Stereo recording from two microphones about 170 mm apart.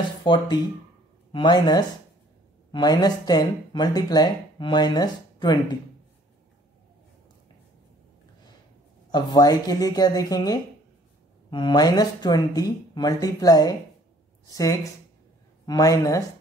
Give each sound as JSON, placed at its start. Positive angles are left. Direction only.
{"t": 0.2, "sound": "speech", "side_deg": 25}
{"t": 9.1, "sound": "speech", "side_deg": 25}